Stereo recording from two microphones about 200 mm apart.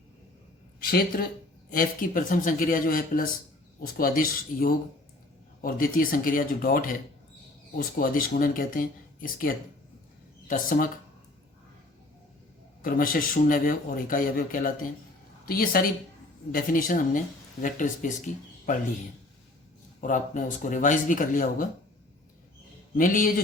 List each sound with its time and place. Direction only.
0.8 s speech: 50° left (ahead or behind)
12.8 s speech: 45° left (ahead or behind)
20.0 s speech: 40° left (ahead or behind)
23.0 s speech: 40° left (ahead or behind)